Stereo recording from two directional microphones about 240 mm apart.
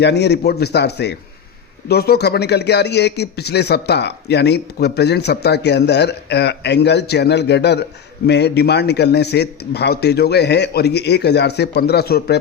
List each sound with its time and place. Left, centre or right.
0.0 s speech: left